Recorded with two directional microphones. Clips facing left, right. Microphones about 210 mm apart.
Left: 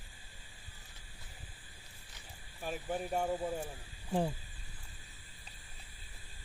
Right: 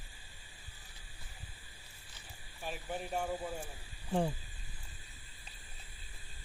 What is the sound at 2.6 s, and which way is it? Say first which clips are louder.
Speech: left 3 dB; 45° left (ahead or behind).